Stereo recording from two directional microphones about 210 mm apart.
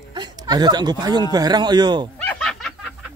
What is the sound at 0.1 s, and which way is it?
Speech, 20° right (ahead or behind).